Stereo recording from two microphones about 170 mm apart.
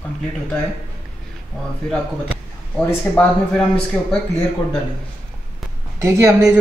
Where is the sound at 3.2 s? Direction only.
5° left (ahead or behind).